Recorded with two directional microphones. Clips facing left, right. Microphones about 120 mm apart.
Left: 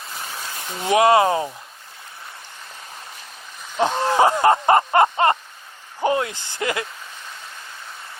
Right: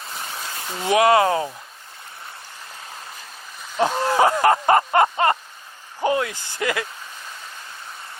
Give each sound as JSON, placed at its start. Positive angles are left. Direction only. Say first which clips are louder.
{"t": 0.1, "sound": "a sound", "louder": "even", "side_deg": -35}
{"t": 0.9, "sound": "speech", "louder": "left 1 dB", "side_deg": 25}
{"t": 3.6, "sound": "splash", "louder": "even", "side_deg": 0}
{"t": 4.0, "sound": "speech", "louder": "left 1 dB", "side_deg": 25}